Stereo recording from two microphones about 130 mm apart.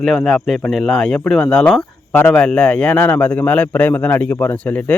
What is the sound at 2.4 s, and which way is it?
A man's voice, 5° left (ahead or behind).